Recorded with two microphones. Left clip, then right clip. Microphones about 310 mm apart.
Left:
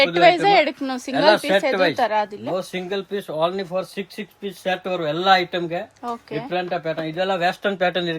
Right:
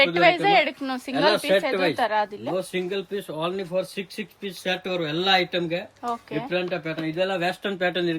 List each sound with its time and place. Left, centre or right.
0.0 s speech: centre
1.4 s speech: left
2.0 s speech: centre
2.6 s speech: left